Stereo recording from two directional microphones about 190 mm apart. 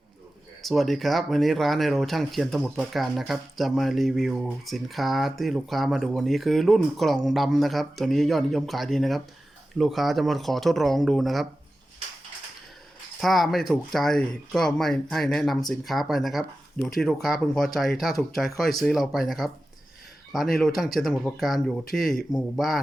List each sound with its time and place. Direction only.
0.6 s speech: centre (ahead or behind)
13.1 s speech: centre (ahead or behind)